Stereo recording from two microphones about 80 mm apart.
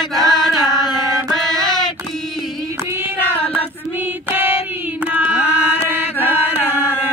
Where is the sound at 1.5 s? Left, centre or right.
Right.